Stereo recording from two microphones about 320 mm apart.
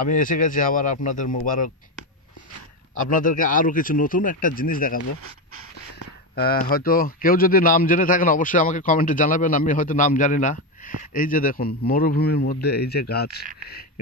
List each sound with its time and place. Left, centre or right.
0.0 s a man's voice: left
3.0 s a man's voice: left
6.3 s a man's voice: left